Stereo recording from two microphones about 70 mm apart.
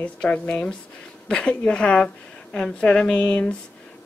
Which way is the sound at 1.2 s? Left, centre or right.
Centre.